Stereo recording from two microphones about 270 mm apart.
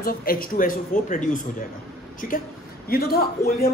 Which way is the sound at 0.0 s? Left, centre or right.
Left.